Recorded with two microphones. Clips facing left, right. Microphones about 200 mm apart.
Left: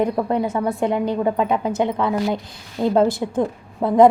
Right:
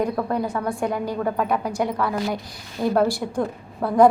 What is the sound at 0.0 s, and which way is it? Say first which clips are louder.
A woman's voice: left 3 dB; 20° left (ahead or behind).